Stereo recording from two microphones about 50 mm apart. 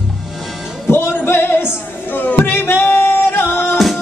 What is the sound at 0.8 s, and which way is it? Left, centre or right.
Music, left.